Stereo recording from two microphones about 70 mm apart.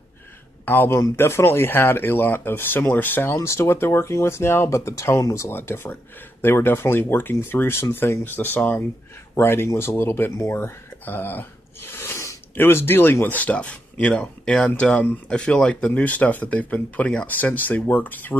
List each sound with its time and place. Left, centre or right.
0.7 s speech: left
3.3 s speech: left
11.1 s a sound: left
12.5 s speech: left
13.4 s speech: centre